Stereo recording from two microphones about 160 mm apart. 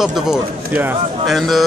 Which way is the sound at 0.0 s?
5° right (ahead or behind).